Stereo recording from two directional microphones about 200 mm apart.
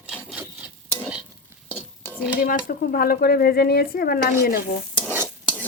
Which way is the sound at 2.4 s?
45° left (ahead or behind).